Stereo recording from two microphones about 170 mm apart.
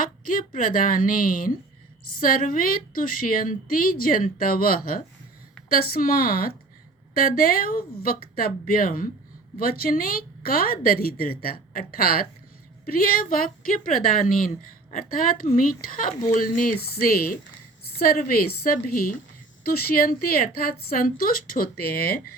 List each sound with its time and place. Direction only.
0.0 s a woman's voice: 55° left (ahead or behind)